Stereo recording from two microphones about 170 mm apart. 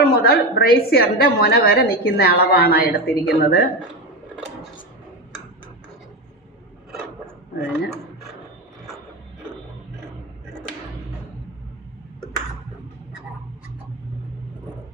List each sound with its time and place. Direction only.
0.0 s a woman's voice: 65° left (ahead or behind)